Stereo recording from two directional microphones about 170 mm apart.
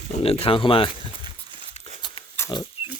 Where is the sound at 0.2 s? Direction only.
35° left (ahead or behind).